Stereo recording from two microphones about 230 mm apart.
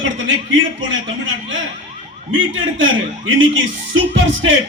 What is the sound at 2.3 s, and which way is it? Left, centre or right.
A man's voice, right.